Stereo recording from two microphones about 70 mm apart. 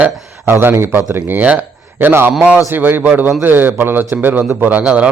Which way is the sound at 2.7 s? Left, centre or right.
Right.